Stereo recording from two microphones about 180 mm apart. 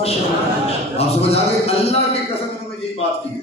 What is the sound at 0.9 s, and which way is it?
A man's voice, 35° left (ahead or behind).